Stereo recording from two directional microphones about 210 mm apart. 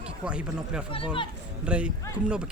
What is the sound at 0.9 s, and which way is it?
Speech, 25° left (ahead or behind).